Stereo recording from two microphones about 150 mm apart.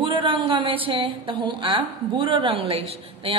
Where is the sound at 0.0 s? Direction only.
35° right (ahead or behind).